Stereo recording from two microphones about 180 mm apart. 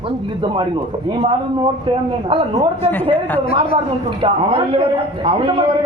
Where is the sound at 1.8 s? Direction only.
30° right (ahead or behind).